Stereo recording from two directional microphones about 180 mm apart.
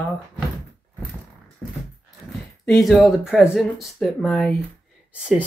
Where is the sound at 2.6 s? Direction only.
Centre (ahead or behind).